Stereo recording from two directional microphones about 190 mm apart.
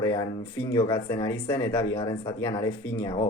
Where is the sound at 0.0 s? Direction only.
15° left (ahead or behind).